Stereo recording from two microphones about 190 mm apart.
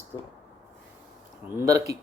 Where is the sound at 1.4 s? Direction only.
15° right (ahead or behind).